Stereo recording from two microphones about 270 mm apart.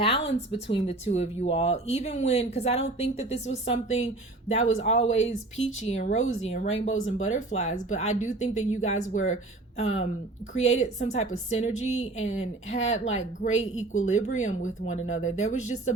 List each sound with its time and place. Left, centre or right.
0.3 s speech: left
5.2 s speech: left
5.9 s speech: left
6.8 s speech: left
7.2 s speech: left
12.4 s speech: left
12.9 s speech: left